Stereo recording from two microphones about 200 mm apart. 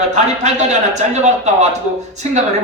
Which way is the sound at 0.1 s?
35° right (ahead or behind).